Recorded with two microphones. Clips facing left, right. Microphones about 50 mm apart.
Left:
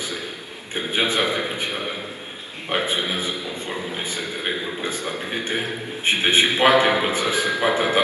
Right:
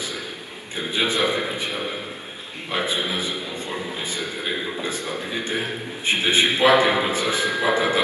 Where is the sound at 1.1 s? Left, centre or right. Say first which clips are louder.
Even; left.